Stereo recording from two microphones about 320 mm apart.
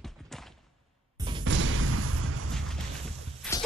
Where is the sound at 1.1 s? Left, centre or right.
Centre.